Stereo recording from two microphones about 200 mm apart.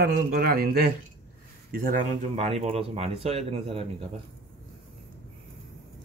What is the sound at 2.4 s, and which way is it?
Speech, 30° right (ahead or behind).